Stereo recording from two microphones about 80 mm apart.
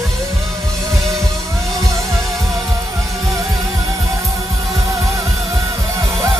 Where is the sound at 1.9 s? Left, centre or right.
Right.